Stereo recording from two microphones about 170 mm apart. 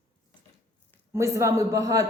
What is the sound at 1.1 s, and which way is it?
Speech, 15° right (ahead or behind).